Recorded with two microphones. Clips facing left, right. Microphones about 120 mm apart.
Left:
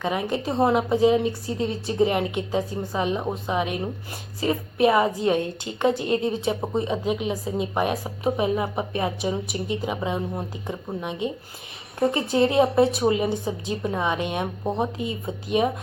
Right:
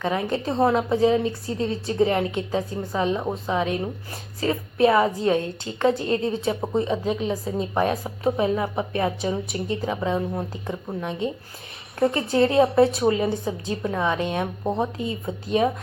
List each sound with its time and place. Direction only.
0.0 s a woman's voice: 15° left (ahead or behind)
3.2 s a woman's voice: 5° left (ahead or behind)
4.4 s a woman's voice: 15° left (ahead or behind)